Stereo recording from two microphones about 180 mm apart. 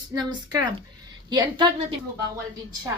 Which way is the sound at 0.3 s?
25° right (ahead or behind).